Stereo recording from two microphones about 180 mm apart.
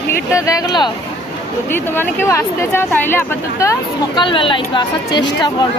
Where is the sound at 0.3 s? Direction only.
20° left (ahead or behind).